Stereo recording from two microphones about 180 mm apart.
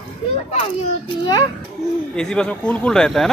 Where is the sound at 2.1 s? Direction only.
5° left (ahead or behind).